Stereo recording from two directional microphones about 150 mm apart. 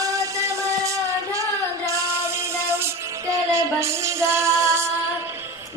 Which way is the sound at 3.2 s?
20° right (ahead or behind).